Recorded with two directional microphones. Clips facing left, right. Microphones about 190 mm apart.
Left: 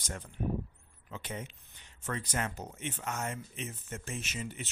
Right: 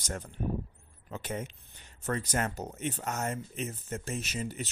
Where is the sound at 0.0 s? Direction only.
45° right (ahead or behind).